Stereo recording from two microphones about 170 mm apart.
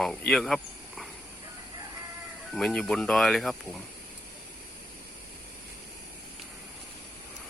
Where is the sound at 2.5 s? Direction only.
5° left (ahead or behind).